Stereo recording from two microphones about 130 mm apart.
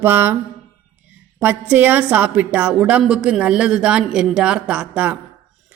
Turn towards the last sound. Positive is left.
turn(degrees=-10)  # may be behind; listen again after turning